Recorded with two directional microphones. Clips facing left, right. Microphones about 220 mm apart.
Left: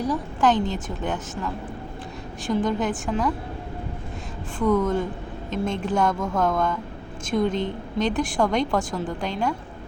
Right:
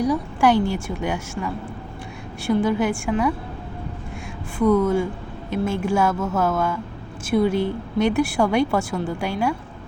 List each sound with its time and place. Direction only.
0.0 s a woman's voice: 10° right (ahead or behind)
4.5 s a woman's voice: 10° right (ahead or behind)